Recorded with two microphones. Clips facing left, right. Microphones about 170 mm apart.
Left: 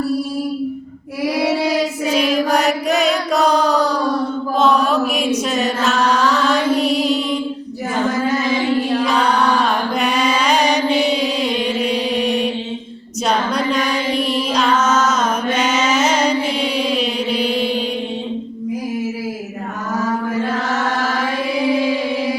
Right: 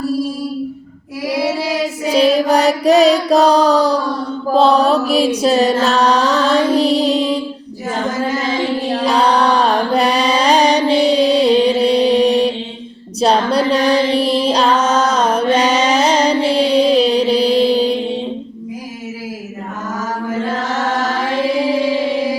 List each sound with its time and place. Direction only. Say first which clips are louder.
2.0 s mantra: right 6 dB; 35° right (ahead or behind)
8.9 s a sound: right 2 dB; 35° right (ahead or behind)
13.2 s music: right 5 dB; 35° right (ahead or behind)